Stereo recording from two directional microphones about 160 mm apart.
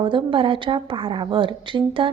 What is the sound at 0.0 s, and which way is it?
A woman's voice, 30° right (ahead or behind).